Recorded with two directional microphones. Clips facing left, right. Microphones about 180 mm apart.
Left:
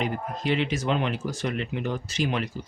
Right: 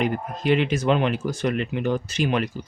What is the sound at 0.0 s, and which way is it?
Speech, 55° right (ahead or behind).